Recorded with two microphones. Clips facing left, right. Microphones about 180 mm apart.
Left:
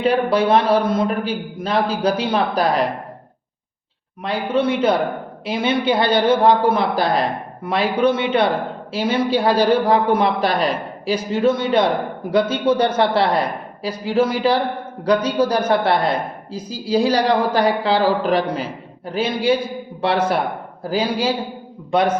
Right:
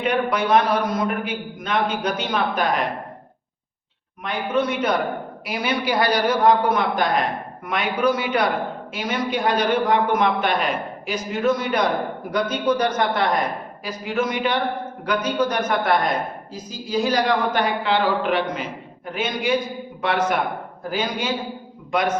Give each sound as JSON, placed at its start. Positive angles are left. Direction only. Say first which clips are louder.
{"t": 0.0, "sound": "a man's voice", "louder": "left 5 dB", "side_deg": 30}
{"t": 4.2, "sound": "a man's voice", "louder": "left 3 dB", "side_deg": 30}